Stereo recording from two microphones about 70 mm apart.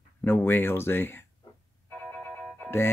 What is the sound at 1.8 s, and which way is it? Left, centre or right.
Music, centre.